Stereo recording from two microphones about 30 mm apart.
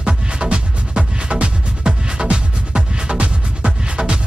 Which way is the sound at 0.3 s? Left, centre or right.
Right.